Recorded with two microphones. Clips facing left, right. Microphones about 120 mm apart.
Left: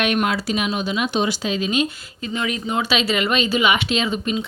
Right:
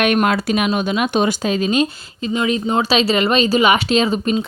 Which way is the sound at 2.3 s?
30° right (ahead or behind).